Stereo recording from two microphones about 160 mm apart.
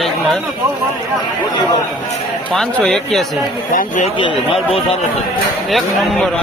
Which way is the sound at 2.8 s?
5° left (ahead or behind).